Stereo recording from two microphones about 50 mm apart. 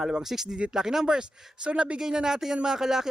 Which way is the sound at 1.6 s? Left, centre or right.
Right.